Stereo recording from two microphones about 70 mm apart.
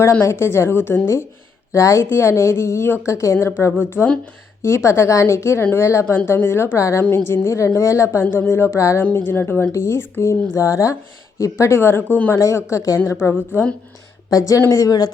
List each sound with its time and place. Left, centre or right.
0.0 s speech: left
8.2 s speech: left
9.0 s speech: left
12.4 s speech: left
14.3 s speech: left